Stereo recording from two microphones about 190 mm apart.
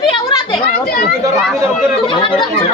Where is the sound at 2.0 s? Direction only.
25° left (ahead or behind).